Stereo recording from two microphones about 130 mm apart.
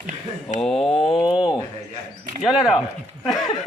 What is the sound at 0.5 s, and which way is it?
Speech, 5° left (ahead or behind).